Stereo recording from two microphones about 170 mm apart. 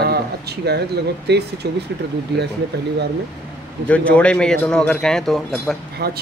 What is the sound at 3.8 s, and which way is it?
Speech, 5° left (ahead or behind).